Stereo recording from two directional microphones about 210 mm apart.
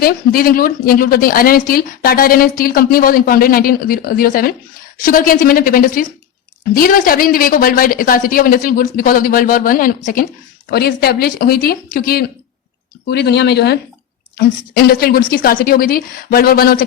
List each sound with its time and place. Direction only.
0.0 s a woman's voice: 45° left (ahead or behind)